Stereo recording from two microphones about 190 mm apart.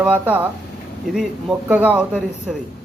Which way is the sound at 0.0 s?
10° right (ahead or behind).